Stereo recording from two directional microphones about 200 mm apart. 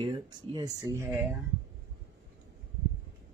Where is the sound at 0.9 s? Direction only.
10° right (ahead or behind).